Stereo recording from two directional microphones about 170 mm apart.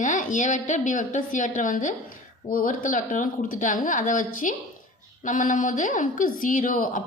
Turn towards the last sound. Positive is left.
turn(degrees=50)  # may be behind; listen again after turning